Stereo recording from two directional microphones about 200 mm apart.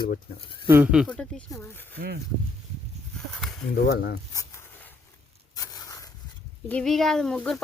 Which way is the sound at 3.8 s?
55° left (ahead or behind).